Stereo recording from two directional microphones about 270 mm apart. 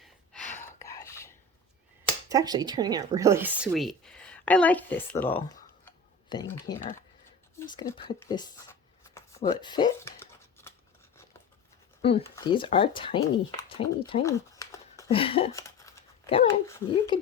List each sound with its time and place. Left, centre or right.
0.5 s whispering: centre
2.3 s speech: centre
7.7 s writing: centre
12.0 s speech: centre